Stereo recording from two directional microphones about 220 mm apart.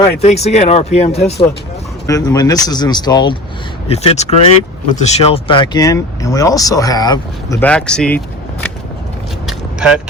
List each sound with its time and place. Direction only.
0.2 s speech: 30° left (ahead or behind)
2.0 s speech: 15° left (ahead or behind)
7.6 s speech: 5° left (ahead or behind)
9.5 s vehicle: centre (ahead or behind)